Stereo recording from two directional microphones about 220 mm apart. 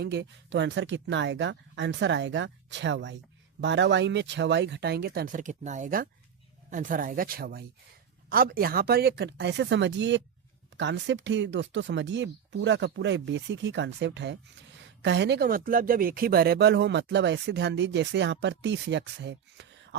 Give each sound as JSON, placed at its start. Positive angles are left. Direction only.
{"t": 0.0, "sound": "speech", "side_deg": -50}